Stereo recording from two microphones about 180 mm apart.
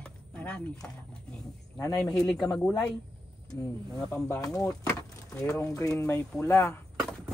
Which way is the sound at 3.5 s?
15° left (ahead or behind).